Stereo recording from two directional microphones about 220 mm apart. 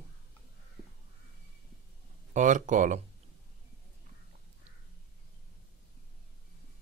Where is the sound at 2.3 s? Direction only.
35° right (ahead or behind).